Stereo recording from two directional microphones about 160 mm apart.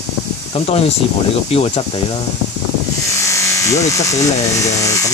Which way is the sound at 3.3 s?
20° left (ahead or behind).